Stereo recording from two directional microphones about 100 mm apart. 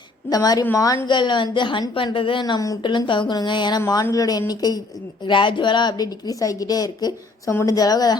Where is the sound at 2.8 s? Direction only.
50° left (ahead or behind).